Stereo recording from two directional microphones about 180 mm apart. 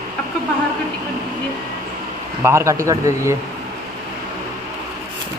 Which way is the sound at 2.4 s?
15° right (ahead or behind).